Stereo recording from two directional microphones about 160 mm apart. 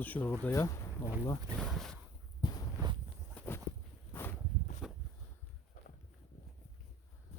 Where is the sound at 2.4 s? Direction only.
25° left (ahead or behind).